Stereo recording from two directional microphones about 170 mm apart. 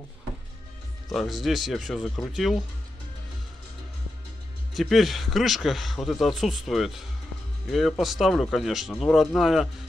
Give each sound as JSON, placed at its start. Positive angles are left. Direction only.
{"t": 1.1, "sound": "speech", "side_deg": 0}
{"t": 4.7, "sound": "speech", "side_deg": 0}